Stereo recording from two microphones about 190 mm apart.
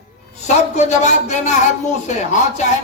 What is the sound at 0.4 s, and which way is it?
A man's voice, 40° left (ahead or behind).